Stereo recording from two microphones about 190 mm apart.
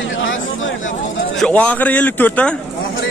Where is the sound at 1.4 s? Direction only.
5° left (ahead or behind).